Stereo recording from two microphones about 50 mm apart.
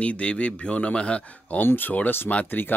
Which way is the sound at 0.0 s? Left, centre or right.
Left.